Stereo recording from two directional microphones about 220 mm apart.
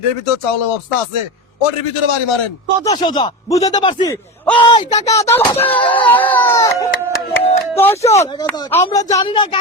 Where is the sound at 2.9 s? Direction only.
20° left (ahead or behind).